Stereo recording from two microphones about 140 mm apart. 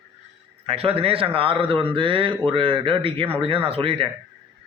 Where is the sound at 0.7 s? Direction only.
45° right (ahead or behind).